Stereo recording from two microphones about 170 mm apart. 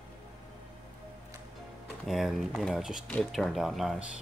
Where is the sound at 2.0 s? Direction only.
Centre (ahead or behind).